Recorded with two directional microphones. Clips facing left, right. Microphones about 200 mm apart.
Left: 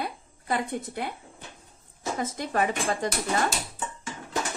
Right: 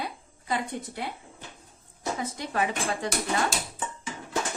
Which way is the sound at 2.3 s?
45° left (ahead or behind).